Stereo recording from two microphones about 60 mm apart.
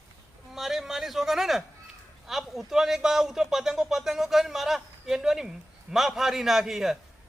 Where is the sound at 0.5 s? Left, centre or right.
Centre.